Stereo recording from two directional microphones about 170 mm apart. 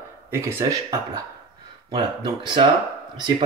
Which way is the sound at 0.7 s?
20° right (ahead or behind).